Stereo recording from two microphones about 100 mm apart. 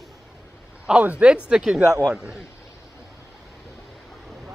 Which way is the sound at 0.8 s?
10° right (ahead or behind).